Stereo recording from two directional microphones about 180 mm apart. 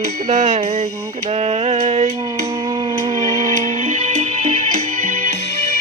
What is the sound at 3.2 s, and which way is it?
Music, 45° right (ahead or behind).